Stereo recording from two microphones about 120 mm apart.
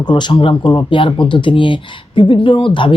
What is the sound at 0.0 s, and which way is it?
Speech, 40° left (ahead or behind).